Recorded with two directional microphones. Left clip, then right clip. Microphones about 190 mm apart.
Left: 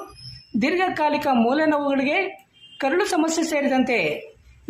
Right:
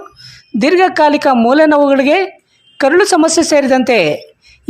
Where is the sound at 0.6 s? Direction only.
50° right (ahead or behind).